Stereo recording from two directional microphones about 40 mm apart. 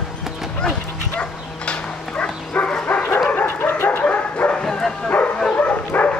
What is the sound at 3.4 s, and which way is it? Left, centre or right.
Dog, left.